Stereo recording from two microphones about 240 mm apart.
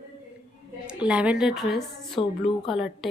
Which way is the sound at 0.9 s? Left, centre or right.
Centre.